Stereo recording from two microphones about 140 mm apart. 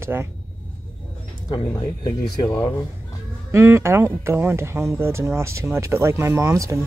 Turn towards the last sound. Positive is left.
turn(degrees=-20)  # may be behind; listen again after turning